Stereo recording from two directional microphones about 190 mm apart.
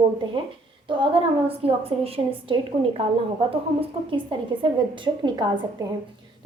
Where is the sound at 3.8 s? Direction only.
25° right (ahead or behind).